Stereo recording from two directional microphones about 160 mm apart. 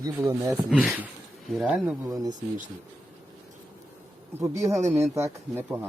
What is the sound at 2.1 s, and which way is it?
Speech, 25° right (ahead or behind).